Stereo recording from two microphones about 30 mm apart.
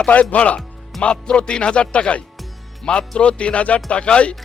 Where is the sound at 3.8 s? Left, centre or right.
Left.